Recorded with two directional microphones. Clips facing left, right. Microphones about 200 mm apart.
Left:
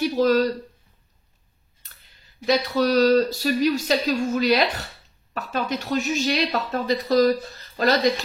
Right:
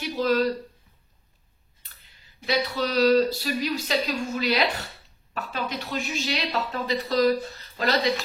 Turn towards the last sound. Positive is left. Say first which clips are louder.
# left 4 dB
turn(degrees=40)  # may be behind; listen again after turning